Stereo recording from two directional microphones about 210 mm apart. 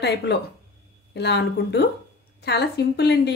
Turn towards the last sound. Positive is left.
turn(degrees=50)  # may be behind; listen again after turning